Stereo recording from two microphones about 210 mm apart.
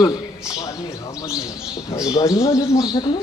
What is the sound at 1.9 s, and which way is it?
Speech, 15° left (ahead or behind).